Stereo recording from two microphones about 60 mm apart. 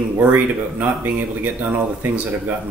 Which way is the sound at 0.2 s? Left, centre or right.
Right.